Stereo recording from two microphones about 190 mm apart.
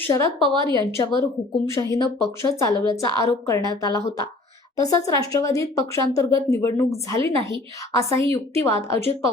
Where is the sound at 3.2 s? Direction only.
15° left (ahead or behind).